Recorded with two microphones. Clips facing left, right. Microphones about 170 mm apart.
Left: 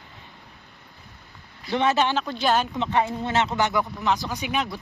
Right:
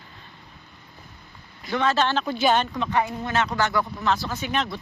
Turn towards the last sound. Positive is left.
turn(degrees=10)  # may be behind; listen again after turning